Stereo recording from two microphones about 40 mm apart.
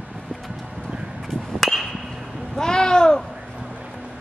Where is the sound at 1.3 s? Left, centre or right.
Centre.